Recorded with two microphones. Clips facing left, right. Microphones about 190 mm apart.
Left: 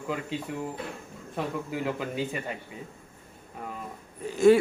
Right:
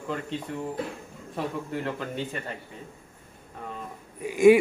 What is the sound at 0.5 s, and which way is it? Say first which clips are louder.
A man's voice: right 2 dB; 5° left (ahead or behind).